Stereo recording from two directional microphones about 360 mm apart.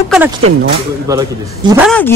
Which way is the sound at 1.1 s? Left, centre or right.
Centre.